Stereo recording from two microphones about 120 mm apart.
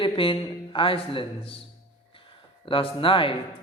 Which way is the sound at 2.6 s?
45° left (ahead or behind).